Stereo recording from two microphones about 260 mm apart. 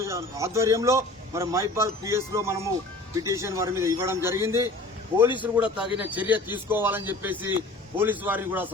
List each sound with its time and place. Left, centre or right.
0.0 s a man's voice: centre
5.5 s a man's voice: centre